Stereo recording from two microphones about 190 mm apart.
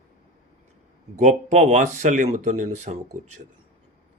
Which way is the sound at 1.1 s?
40° right (ahead or behind).